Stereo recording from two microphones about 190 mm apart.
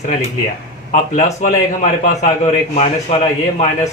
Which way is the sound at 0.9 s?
40° left (ahead or behind).